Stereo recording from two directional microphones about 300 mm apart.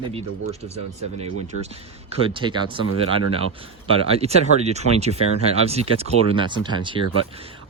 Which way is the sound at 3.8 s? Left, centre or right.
Centre.